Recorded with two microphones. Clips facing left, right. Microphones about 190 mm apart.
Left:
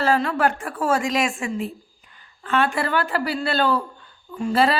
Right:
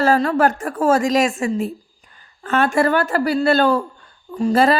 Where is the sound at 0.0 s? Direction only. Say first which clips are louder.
Right 4 dB; 40° right (ahead or behind).